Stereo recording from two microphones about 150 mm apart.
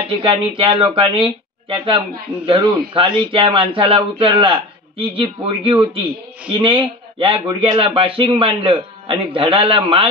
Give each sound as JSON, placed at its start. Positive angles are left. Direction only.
{"t": 0.1, "sound": "speech", "side_deg": -35}